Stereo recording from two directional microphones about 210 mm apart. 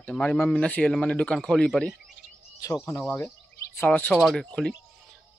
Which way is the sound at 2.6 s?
15° left (ahead or behind).